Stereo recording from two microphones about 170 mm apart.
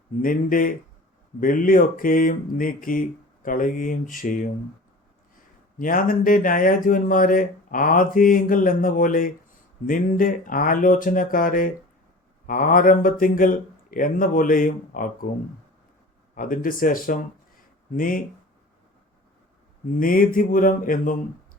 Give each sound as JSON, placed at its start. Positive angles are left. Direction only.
{"t": 0.2, "sound": "speech", "side_deg": 55}
{"t": 5.8, "sound": "speech", "side_deg": 55}
{"t": 16.3, "sound": "speech", "side_deg": 55}
{"t": 20.0, "sound": "speech", "side_deg": 55}